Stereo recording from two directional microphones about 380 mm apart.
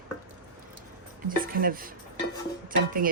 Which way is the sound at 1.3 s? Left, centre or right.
Right.